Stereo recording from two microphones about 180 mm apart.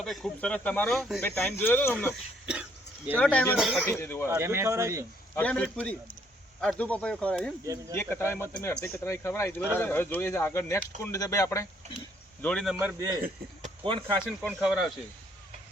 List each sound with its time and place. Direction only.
0.0 s speech: centre (ahead or behind)
3.2 s speech: 5° left (ahead or behind)
3.6 s speech: 5° right (ahead or behind)
3.8 s speech: 10° left (ahead or behind)
4.3 s speech: 15° right (ahead or behind)
5.3 s speech: 10° left (ahead or behind)
7.6 s speech: 20° right (ahead or behind)
7.9 s speech: 10° left (ahead or behind)
12.4 s speech: 5° left (ahead or behind)
12.7 s speech: 15° right (ahead or behind)
13.8 s speech: 30° right (ahead or behind)
14.3 s speech: 5° right (ahead or behind)